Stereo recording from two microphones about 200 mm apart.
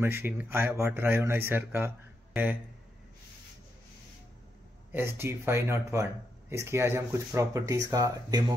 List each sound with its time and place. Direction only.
0.0 s speech: 10° right (ahead or behind)
4.9 s speech: 10° right (ahead or behind)